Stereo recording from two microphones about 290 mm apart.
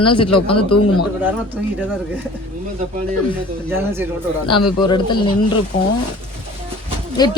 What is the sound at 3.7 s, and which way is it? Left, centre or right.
Speech, centre.